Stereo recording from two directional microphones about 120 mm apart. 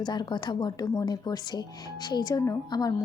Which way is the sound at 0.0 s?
35° left (ahead or behind).